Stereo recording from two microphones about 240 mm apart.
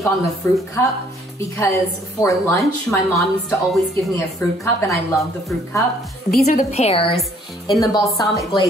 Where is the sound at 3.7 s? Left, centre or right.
Centre.